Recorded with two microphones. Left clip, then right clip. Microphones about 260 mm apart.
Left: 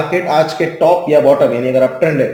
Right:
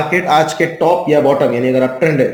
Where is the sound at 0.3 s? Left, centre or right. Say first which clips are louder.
Left 2 dB; right.